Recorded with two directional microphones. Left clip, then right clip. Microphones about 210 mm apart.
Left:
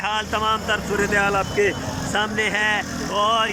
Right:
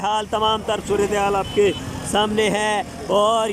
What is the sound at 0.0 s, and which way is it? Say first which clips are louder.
Speech: right 2 dB; 20° right (ahead or behind).